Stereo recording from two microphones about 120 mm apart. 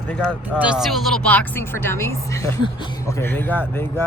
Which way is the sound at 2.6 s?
40° left (ahead or behind).